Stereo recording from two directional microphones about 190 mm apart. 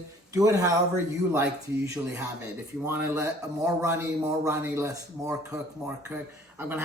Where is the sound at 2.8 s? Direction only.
10° right (ahead or behind).